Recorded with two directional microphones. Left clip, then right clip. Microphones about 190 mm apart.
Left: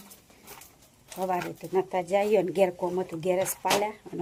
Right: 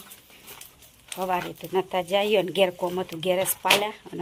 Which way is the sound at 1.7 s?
5° right (ahead or behind).